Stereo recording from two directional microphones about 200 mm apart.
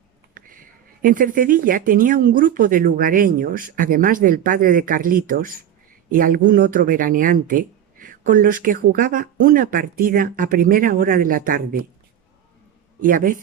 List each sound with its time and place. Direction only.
0.3 s a sound: 45° right (ahead or behind)
1.0 s speech: 45° right (ahead or behind)
13.0 s a man's voice: 40° right (ahead or behind)